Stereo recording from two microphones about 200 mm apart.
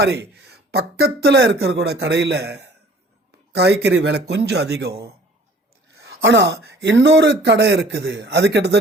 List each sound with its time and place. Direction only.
0.0 s speech: 55° right (ahead or behind)
6.1 s speech: 70° right (ahead or behind)